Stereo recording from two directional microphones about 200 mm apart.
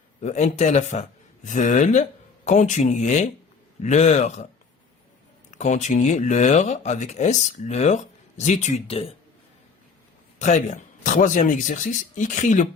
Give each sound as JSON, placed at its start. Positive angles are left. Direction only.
{"t": 0.2, "sound": "speech", "side_deg": 35}
{"t": 5.5, "sound": "speech", "side_deg": 35}
{"t": 10.3, "sound": "speech", "side_deg": 35}